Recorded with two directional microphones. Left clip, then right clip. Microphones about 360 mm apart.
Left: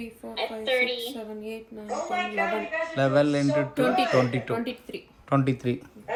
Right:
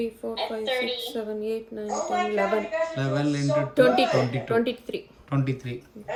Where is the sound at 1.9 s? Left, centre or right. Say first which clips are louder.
Right 3 dB; centre.